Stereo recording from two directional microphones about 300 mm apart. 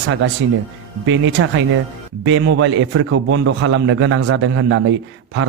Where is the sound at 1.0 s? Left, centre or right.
Right.